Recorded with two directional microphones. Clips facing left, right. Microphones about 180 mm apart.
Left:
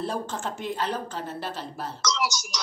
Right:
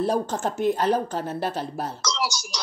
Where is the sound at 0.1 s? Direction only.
45° right (ahead or behind).